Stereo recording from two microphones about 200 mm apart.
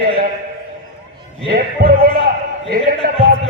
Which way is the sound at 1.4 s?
50° right (ahead or behind).